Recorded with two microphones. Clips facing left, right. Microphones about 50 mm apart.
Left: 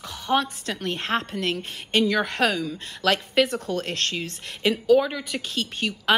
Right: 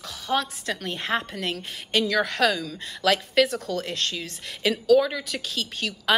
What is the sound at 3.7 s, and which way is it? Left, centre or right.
Speech, left.